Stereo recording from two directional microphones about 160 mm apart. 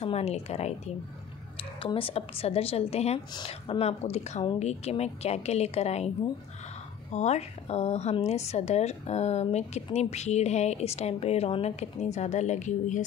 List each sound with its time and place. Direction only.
0.0 s a woman's voice: 40° left (ahead or behind)